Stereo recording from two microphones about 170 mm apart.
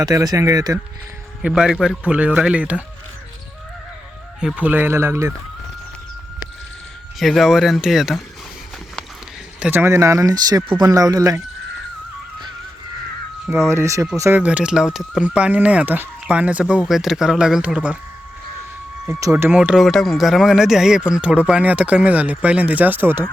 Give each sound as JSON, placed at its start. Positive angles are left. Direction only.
{"t": 0.0, "sound": "speech", "side_deg": -20}
{"t": 1.4, "sound": "speech", "side_deg": -5}
{"t": 4.4, "sound": "speech", "side_deg": -5}
{"t": 7.2, "sound": "speech", "side_deg": 0}
{"t": 9.6, "sound": "speech", "side_deg": -10}
{"t": 13.7, "sound": "speech", "side_deg": -15}
{"t": 19.0, "sound": "speech", "side_deg": -15}